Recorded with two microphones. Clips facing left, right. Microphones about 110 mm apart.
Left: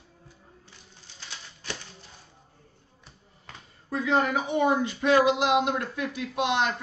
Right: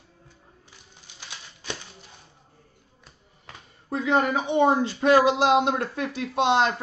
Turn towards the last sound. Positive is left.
turn(degrees=-35)  # may be behind; listen again after turning